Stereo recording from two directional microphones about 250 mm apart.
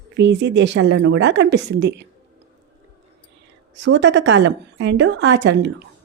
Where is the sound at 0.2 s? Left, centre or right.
Right.